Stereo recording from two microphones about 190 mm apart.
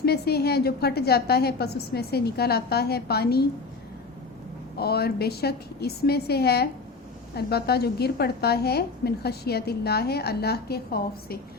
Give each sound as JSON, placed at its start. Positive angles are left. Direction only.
{"t": 0.0, "sound": "a woman's voice", "side_deg": 55}
{"t": 4.8, "sound": "a woman's voice", "side_deg": 55}